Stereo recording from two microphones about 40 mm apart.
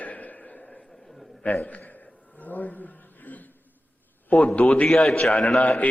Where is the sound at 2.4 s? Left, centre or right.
Left.